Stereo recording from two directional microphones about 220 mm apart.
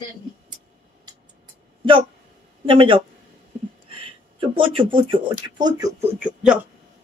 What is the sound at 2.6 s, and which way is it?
Speech, 25° right (ahead or behind).